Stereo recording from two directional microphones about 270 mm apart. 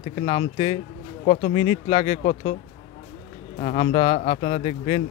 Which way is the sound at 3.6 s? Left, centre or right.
Left.